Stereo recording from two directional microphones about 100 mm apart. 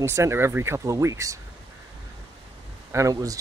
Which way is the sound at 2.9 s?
35° right (ahead or behind).